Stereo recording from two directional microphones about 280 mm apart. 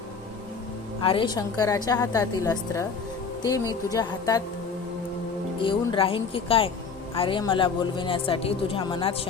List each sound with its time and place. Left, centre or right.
1.0 s a woman's voice: centre
5.5 s speech: centre